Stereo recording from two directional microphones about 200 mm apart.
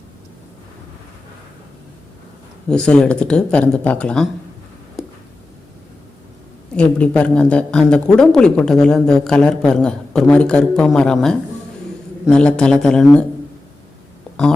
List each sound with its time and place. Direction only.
2.6 s a woman's voice: 5° left (ahead or behind)
6.7 s a woman's voice: 5° left (ahead or behind)